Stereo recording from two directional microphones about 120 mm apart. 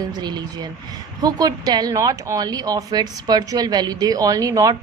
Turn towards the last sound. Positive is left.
turn(degrees=-30)  # may be behind; listen again after turning